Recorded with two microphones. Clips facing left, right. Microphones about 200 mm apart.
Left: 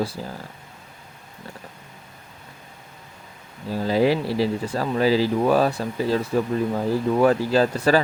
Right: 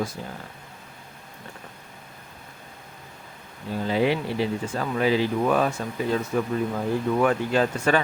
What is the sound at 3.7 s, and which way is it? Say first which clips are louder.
Speech: left 3 dB; 35° left (ahead or behind).